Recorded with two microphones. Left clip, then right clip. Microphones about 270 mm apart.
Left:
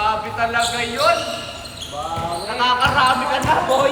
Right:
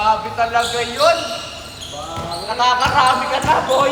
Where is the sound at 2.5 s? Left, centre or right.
Right.